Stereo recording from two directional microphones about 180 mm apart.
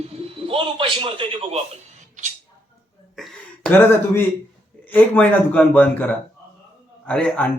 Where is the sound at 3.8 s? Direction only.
10° left (ahead or behind).